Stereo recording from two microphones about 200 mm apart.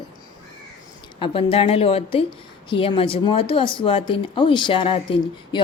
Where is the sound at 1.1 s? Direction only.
25° left (ahead or behind).